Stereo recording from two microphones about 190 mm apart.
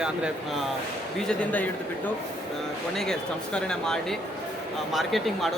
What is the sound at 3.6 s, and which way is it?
Speech, 5° left (ahead or behind).